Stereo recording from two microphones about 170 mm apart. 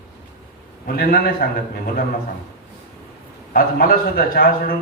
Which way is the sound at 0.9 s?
60° left (ahead or behind).